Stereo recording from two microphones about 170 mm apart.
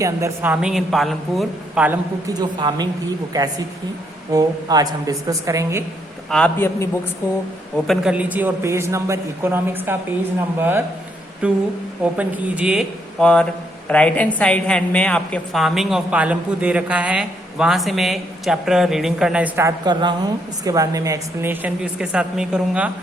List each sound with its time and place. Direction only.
0.0 s a woman's voice: 15° right (ahead or behind)
2.2 s a woman's voice: 25° right (ahead or behind)
6.3 s a man's voice: 10° left (ahead or behind)
7.9 s a woman's voice: 5° right (ahead or behind)
13.1 s a woman's voice: 5° left (ahead or behind)